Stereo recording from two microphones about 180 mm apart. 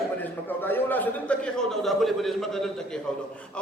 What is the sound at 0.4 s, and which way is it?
A man's voice, 10° left (ahead or behind).